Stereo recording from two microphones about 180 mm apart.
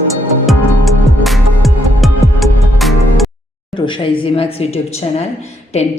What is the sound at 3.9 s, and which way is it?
A woman's voice, 30° left (ahead or behind).